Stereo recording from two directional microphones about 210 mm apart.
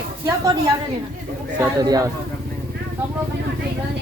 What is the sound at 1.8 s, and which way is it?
Speech, 15° right (ahead or behind).